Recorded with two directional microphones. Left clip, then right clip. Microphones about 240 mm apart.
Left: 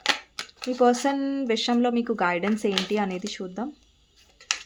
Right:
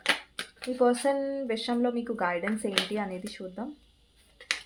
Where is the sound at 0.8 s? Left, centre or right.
Left.